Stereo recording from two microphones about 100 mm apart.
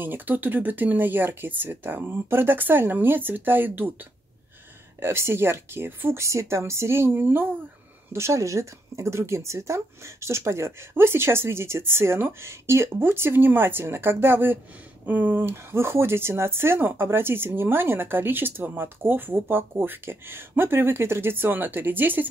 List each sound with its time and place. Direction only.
0.0 s speech: 20° right (ahead or behind)